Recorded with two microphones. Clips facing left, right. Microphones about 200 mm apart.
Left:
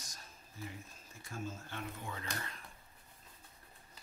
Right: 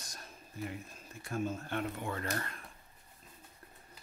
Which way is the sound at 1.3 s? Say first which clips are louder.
Right 8 dB; 60° right (ahead or behind).